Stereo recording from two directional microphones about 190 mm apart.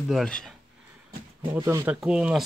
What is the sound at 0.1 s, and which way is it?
Speech, 5° left (ahead or behind).